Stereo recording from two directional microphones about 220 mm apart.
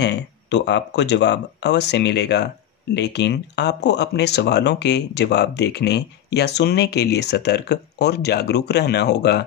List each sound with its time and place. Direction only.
0.0 s speech: 50° left (ahead or behind)